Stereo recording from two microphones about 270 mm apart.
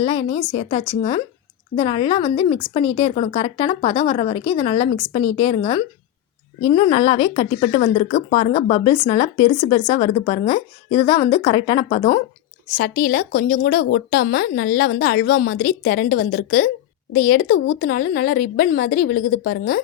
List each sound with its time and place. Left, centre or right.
0.0 s speech: left
12.7 s speech: left